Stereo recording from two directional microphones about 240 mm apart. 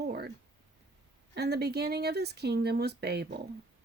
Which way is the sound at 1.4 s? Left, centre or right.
Right.